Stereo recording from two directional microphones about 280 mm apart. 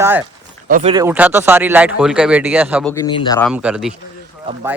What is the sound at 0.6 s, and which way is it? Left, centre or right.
Speech, right.